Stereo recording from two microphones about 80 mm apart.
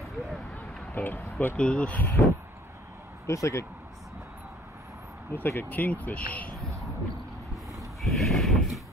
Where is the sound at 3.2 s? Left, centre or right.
Left.